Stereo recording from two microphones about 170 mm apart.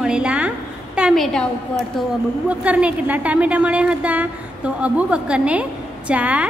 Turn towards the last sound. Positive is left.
turn(degrees=-5)  # may be behind; listen again after turning